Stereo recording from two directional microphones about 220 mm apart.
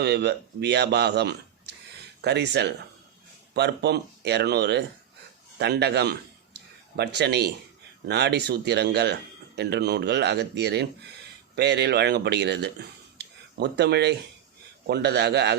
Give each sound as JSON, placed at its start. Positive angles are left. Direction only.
{"t": 0.0, "sound": "a man's voice", "side_deg": -50}
{"t": 13.1, "sound": "a sound", "side_deg": -50}
{"t": 14.8, "sound": "speech", "side_deg": -50}